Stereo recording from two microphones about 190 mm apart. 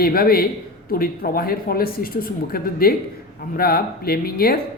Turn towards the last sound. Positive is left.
turn(degrees=55)  # may be behind; listen again after turning